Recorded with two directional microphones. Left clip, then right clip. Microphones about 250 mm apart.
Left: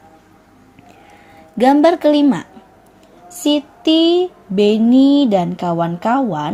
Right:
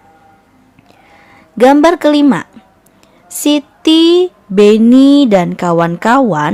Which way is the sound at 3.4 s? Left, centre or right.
Right.